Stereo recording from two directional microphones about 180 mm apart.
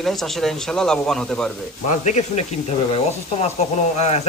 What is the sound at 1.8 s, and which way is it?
Speech, 40° left (ahead or behind).